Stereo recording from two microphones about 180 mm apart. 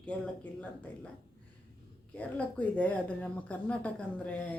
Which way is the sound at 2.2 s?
10° left (ahead or behind).